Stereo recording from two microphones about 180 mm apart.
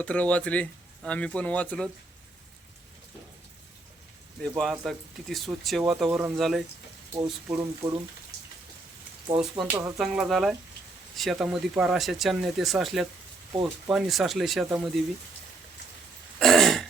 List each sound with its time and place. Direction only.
0.0 s speech: 5° left (ahead or behind)
4.4 s speech: centre (ahead or behind)
7.4 s speech: 15° right (ahead or behind)
9.4 s speech: centre (ahead or behind)
16.4 s throat clearing: centre (ahead or behind)